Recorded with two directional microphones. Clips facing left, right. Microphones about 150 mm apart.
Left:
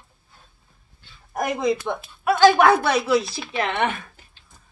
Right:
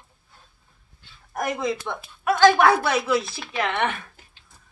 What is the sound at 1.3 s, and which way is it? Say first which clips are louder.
Speech: left 3 dB; 15° left (ahead or behind).